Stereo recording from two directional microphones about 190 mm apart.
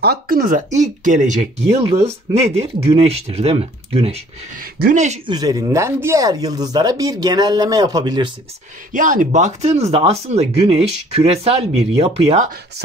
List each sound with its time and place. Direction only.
0.0 s speech: 55° right (ahead or behind); by 4.2 s 30° right (ahead or behind)
4.7 s speech: 45° right (ahead or behind)
5.3 s speech: 20° right (ahead or behind)
8.9 s speech: 45° right (ahead or behind)